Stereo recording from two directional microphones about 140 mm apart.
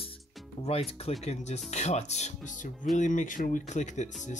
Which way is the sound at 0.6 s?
45° left (ahead or behind).